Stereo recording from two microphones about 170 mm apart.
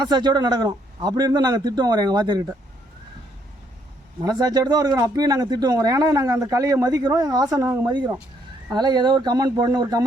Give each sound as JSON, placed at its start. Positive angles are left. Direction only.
{"t": 0.0, "sound": "speech", "side_deg": -25}
{"t": 4.2, "sound": "speech", "side_deg": -20}